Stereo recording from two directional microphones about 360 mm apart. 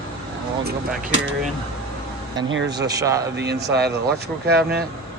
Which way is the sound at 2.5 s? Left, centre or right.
Right.